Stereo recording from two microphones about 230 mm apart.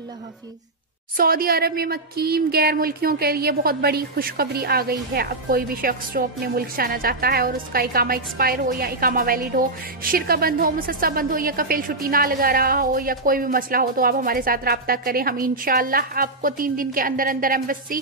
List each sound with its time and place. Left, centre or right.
1.1 s speech: right